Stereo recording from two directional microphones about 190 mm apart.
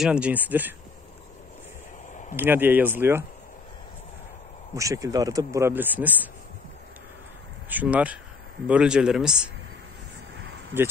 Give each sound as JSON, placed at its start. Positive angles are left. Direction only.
{"t": 0.0, "sound": "speech", "side_deg": -5}
{"t": 2.3, "sound": "speech", "side_deg": -10}
{"t": 4.7, "sound": "speech", "side_deg": -15}
{"t": 7.7, "sound": "speech", "side_deg": -5}